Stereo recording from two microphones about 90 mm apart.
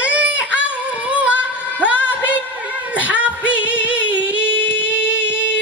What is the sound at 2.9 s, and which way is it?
Singing, 15° right (ahead or behind).